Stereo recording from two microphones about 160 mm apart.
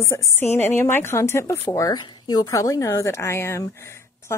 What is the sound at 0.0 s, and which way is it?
A woman's voice, 15° left (ahead or behind).